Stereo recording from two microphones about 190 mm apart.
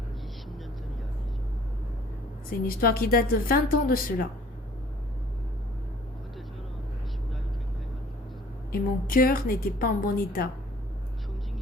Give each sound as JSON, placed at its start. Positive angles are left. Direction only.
{"t": 2.6, "sound": "a woman's voice", "side_deg": 50}
{"t": 8.7, "sound": "a woman's voice", "side_deg": 50}